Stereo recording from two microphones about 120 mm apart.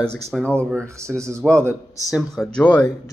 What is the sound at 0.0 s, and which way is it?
Speech, 5° left (ahead or behind).